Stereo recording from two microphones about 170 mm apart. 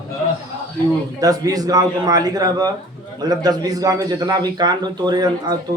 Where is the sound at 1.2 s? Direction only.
20° right (ahead or behind).